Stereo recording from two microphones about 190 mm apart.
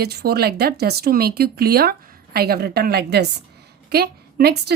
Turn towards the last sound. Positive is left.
turn(degrees=-60)  # may be behind; listen again after turning